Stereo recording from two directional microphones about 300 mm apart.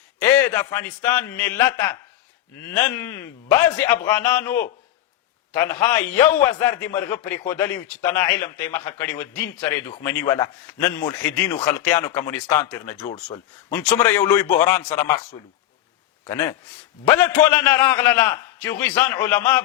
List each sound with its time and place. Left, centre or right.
0.2 s a man's voice: centre
13.1 s speech: left
13.7 s a man's voice: centre
17.1 s a man's voice: centre